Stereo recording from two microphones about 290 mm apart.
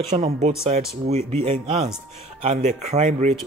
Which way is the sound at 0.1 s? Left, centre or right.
Right.